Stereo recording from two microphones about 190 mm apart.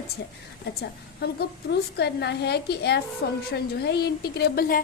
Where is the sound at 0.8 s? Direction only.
55° left (ahead or behind).